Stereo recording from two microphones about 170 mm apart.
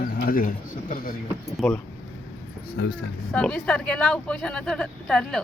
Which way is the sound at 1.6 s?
Centre (ahead or behind).